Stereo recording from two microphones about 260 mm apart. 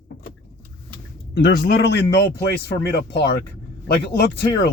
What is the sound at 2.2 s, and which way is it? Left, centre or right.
Speech, left.